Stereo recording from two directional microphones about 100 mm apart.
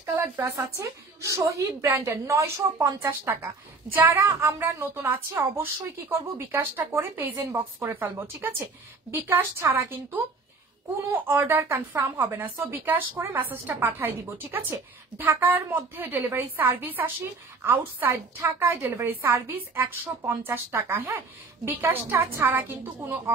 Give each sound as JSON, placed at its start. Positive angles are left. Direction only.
{"t": 0.0, "sound": "a woman's voice", "side_deg": -30}
{"t": 18.6, "sound": "a woman's voice", "side_deg": -20}